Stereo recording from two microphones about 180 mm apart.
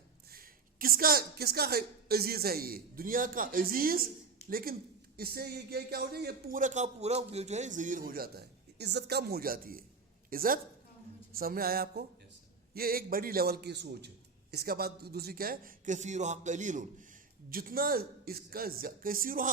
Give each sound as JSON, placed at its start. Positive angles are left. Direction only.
{"t": 0.3, "sound": "a man's voice", "side_deg": -55}